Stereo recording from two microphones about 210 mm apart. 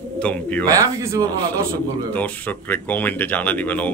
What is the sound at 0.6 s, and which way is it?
Speech, 15° right (ahead or behind).